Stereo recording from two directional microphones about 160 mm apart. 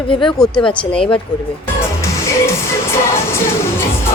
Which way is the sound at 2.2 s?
15° left (ahead or behind).